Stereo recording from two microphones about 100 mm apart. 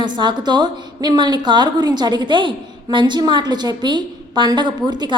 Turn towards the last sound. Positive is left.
turn(degrees=-50)  # may be behind; listen again after turning